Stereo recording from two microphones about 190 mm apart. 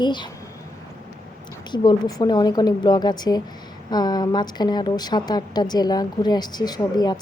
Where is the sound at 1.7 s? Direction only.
20° left (ahead or behind).